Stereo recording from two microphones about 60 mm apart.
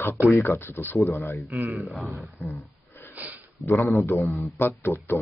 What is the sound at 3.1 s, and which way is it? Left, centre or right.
Sniff, right.